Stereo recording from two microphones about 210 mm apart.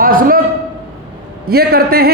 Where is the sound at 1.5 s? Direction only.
45° right (ahead or behind).